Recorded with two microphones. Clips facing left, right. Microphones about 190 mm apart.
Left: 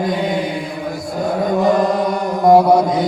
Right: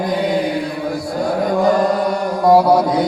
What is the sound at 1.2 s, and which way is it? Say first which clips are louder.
Chant: even; 20° left (ahead or behind).